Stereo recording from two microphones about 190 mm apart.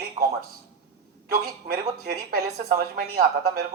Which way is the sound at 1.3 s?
55° right (ahead or behind).